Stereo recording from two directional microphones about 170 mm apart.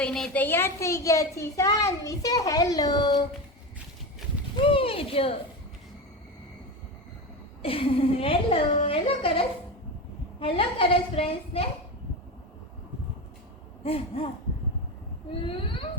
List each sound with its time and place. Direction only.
0.0 s a child's voice: 5° left (ahead or behind); by 3.2 s 25° left (ahead or behind)
4.5 s speech: 30° left (ahead or behind)
7.6 s a woman's voice: 35° left (ahead or behind)
13.8 s a woman's voice: 35° left (ahead or behind)